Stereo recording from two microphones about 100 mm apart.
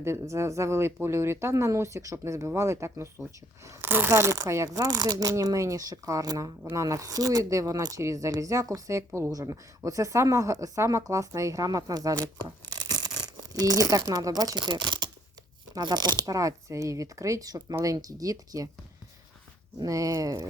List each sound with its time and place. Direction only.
0.0 s speech: 30° right (ahead or behind)
12.2 s speech: 20° left (ahead or behind)
12.7 s a sound: 40° right (ahead or behind)
13.5 s speech: 35° right (ahead or behind)
19.8 s speech: 35° right (ahead or behind)